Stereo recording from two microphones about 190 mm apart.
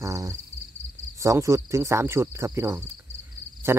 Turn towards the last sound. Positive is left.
turn(degrees=-10)  # may be behind; listen again after turning